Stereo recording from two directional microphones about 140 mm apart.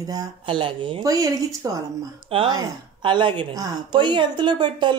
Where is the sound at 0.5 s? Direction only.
35° right (ahead or behind).